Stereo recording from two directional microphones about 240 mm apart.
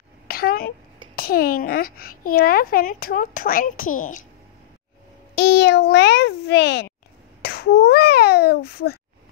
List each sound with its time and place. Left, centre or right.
0.3 s a child's voice: left
5.3 s a child's voice: left
7.4 s a sound: left